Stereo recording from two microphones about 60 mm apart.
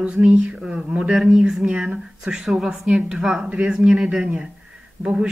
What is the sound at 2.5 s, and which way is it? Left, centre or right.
Speech, centre.